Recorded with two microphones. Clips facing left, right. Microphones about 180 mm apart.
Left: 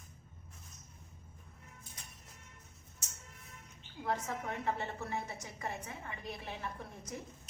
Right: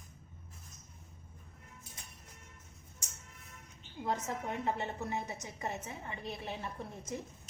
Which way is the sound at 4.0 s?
20° right (ahead or behind).